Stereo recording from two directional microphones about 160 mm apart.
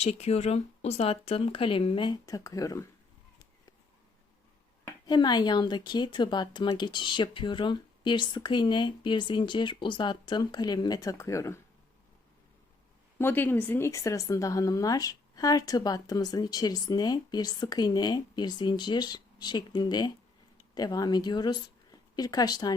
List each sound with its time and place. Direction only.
0.0 s speech: 40° left (ahead or behind); by 2.9 s 20° left (ahead or behind)
5.0 s speech: 25° left (ahead or behind)
13.1 s speech: 15° left (ahead or behind)